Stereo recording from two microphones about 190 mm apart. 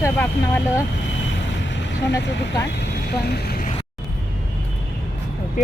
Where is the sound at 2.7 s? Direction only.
60° left (ahead or behind).